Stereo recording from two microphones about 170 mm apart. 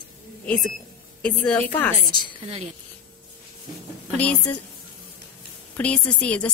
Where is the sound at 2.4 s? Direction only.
35° right (ahead or behind).